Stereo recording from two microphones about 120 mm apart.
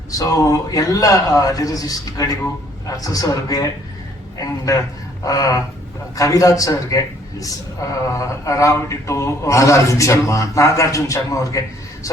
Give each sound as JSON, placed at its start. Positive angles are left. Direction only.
{"t": 0.1, "sound": "a man's voice", "side_deg": 30}